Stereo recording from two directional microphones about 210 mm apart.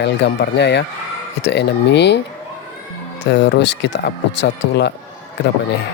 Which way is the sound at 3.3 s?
55° left (ahead or behind).